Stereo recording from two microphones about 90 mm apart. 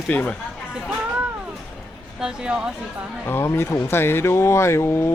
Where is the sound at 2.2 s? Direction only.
10° right (ahead or behind).